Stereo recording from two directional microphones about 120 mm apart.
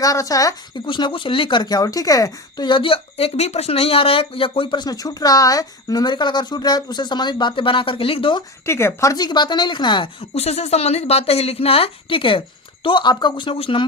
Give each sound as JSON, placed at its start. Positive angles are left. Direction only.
{"t": 0.0, "sound": "speech", "side_deg": 30}
{"t": 0.9, "sound": "a woman's voice", "side_deg": 40}
{"t": 2.6, "sound": "a woman's voice", "side_deg": 45}
{"t": 8.6, "sound": "a woman's voice", "side_deg": 20}
{"t": 10.3, "sound": "a woman's voice", "side_deg": 60}